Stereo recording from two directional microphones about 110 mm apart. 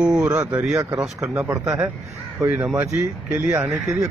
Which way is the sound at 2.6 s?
10° right (ahead or behind).